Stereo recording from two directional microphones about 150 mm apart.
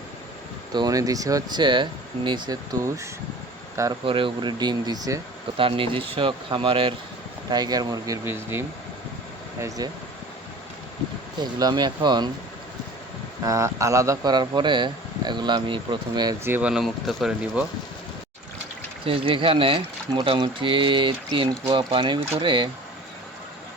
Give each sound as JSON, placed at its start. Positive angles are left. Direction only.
{"t": 0.7, "sound": "speech", "side_deg": -25}
{"t": 4.0, "sound": "speech", "side_deg": -35}
{"t": 5.5, "sound": "speech", "side_deg": -35}
{"t": 11.6, "sound": "speech", "side_deg": -30}
{"t": 13.4, "sound": "speech", "side_deg": -20}
{"t": 16.4, "sound": "speech", "side_deg": -10}
{"t": 19.0, "sound": "speech", "side_deg": -35}